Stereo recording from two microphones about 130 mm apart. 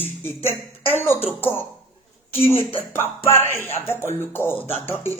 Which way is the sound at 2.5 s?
20° left (ahead or behind).